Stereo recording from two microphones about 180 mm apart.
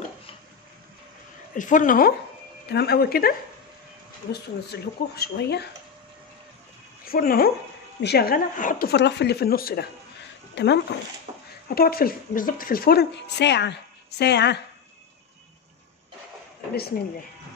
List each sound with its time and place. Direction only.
1.5 s a woman's voice: 45° left (ahead or behind)
2.7 s a woman's voice: 60° left (ahead or behind)
7.1 s a woman's voice: 55° left (ahead or behind)
8.9 s a woman's voice: 75° left (ahead or behind); by 9.8 s 55° left (ahead or behind)
10.5 s speech: 70° left (ahead or behind)
11.3 s a sound: 30° right (ahead or behind)
11.7 s a woman's voice: 55° left (ahead or behind)